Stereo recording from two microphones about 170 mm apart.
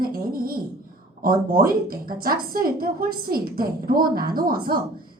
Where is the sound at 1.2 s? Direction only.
60° right (ahead or behind).